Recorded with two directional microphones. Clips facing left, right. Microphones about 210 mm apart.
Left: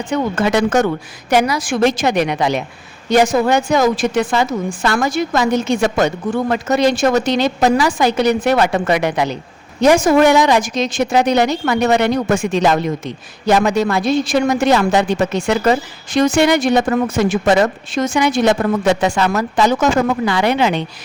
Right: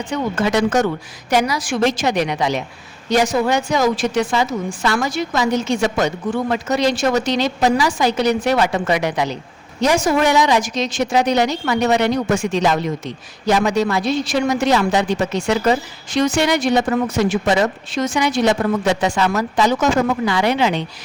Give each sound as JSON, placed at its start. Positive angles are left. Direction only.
{"t": 0.1, "sound": "a woman's voice", "side_deg": 55}